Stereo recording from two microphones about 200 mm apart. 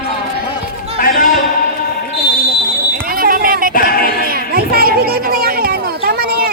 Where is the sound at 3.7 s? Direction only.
45° left (ahead or behind).